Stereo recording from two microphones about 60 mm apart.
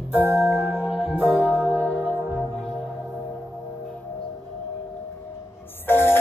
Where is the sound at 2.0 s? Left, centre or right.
Right.